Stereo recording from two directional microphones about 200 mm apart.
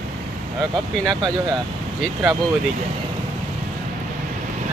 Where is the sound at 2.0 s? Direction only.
5° right (ahead or behind).